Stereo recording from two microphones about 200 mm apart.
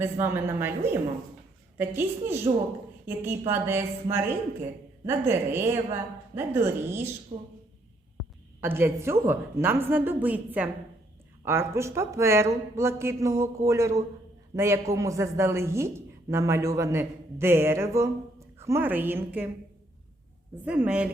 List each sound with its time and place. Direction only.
0.0 s speech: 10° right (ahead or behind)
7.3 s speech: 30° right (ahead or behind)
8.6 s speech: 10° right (ahead or behind)
20.7 s speech: 5° right (ahead or behind)